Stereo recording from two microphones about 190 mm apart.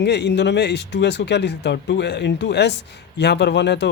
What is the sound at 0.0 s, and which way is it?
A man's voice, 65° left (ahead or behind).